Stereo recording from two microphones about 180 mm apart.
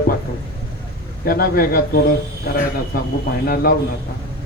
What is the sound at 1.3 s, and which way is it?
Speech, 55° left (ahead or behind).